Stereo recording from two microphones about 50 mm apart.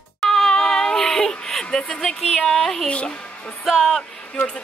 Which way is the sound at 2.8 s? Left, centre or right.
Left.